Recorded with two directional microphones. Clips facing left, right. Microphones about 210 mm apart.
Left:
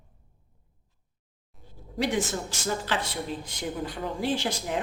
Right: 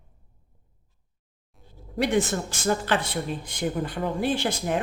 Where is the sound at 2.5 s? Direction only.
55° right (ahead or behind).